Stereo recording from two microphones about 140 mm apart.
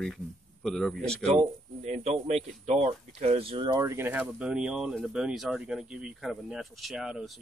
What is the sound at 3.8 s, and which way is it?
Speech, 20° right (ahead or behind).